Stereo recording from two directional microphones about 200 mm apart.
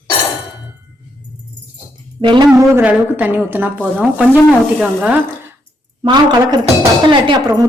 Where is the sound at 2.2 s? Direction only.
25° right (ahead or behind).